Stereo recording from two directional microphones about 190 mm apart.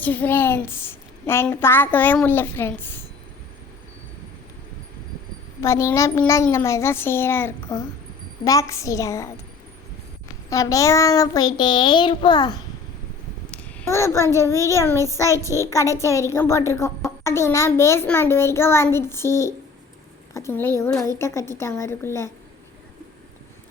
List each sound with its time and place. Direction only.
0.0 s a woman's voice: 10° left (ahead or behind)
5.5 s a woman's voice: 15° left (ahead or behind)
10.5 s child singing: 15° left (ahead or behind)
13.5 s a sound: 15° left (ahead or behind)
14.3 s a woman's voice: 15° left (ahead or behind)